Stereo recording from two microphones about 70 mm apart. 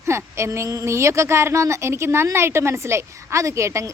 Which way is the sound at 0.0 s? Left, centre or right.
Right.